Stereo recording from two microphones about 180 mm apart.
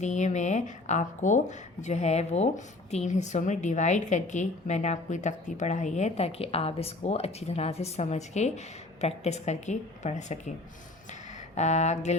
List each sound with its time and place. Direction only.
0.0 s a woman's voice: 40° left (ahead or behind)
11.5 s a woman's voice: 40° left (ahead or behind)